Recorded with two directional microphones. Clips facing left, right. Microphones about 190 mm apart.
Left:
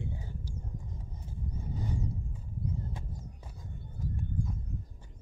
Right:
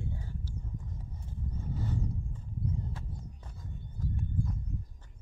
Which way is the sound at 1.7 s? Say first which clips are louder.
Right 1 dB; 15° left (ahead or behind).